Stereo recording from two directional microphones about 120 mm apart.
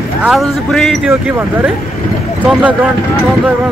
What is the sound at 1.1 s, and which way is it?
Speech, 15° right (ahead or behind).